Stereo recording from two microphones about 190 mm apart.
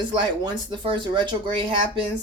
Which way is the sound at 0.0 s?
25° right (ahead or behind).